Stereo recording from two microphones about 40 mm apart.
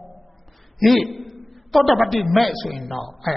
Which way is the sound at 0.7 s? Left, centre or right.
Centre.